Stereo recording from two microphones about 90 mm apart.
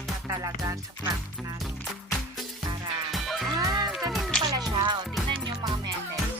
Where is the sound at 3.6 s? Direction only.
45° right (ahead or behind).